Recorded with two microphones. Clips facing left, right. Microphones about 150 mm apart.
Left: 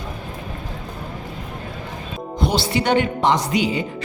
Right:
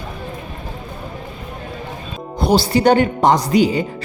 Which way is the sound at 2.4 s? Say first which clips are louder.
Right 7 dB; 40° right (ahead or behind).